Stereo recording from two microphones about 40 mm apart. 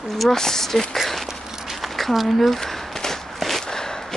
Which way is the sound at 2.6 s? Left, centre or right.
Centre.